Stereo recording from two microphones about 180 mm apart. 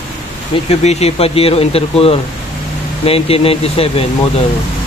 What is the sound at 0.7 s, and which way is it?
Speech, 35° left (ahead or behind).